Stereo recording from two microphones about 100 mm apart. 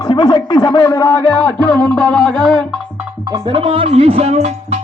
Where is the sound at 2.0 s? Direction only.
50° right (ahead or behind).